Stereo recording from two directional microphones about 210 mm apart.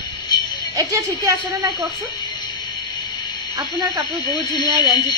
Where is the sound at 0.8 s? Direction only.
15° right (ahead or behind).